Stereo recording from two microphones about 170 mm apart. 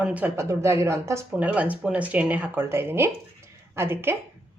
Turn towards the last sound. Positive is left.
turn(degrees=-15)  # may be behind; listen again after turning